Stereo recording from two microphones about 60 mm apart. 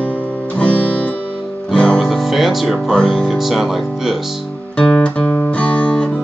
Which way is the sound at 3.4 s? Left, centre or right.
Centre.